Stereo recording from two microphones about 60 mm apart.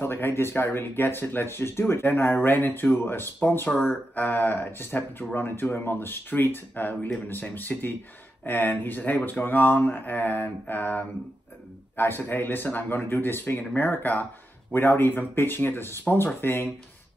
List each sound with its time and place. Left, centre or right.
0.0 s speech: left